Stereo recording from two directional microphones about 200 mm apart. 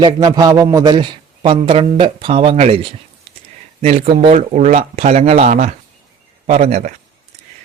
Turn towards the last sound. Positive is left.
turn(degrees=-35)  # may be behind; listen again after turning